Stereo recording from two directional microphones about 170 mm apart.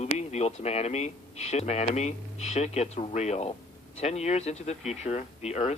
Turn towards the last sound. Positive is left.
turn(degrees=40)  # may be behind; listen again after turning